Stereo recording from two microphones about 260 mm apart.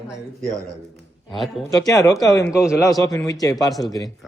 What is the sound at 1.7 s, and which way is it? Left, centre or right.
A man's voice, centre.